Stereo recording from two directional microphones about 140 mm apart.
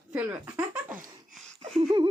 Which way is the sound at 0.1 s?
15° right (ahead or behind).